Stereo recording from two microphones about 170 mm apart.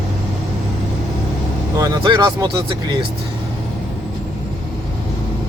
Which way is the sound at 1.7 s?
20° right (ahead or behind).